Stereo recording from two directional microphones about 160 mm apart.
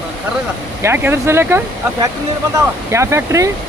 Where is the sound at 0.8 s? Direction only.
15° right (ahead or behind).